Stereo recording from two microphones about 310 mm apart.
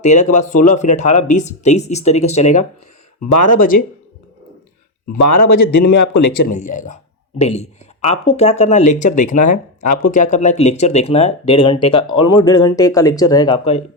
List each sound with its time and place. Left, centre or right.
0.0 s speech: left
5.2 s a man's voice: left
6.5 s speech: left